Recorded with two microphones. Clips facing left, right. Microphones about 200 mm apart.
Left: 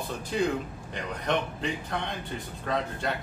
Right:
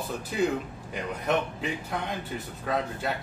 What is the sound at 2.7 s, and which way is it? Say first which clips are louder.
Speech: right 1 dB; 5° right (ahead or behind).